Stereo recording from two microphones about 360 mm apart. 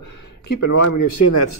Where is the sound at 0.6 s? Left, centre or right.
Left.